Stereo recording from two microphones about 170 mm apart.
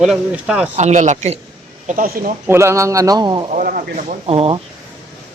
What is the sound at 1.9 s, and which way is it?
Speech, 55° right (ahead or behind).